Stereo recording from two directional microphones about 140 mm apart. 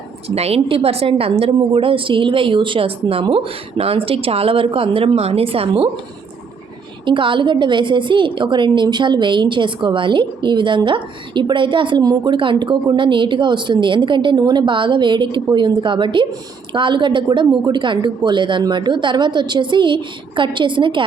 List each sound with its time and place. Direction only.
0.3 s a woman's voice: 45° right (ahead or behind)
7.0 s a woman's voice: 35° right (ahead or behind)